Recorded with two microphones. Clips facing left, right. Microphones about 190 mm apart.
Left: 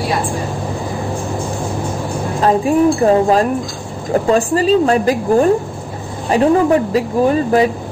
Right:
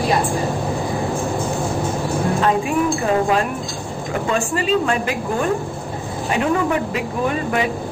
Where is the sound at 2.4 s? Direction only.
35° left (ahead or behind).